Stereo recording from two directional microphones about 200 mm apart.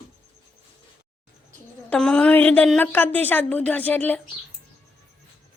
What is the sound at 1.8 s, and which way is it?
A woman's voice, 5° left (ahead or behind).